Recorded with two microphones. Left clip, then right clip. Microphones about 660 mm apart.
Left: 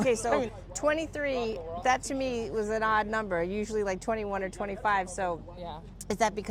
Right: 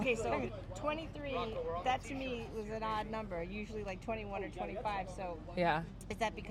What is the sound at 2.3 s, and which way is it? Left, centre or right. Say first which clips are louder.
Speech: left 11 dB; left.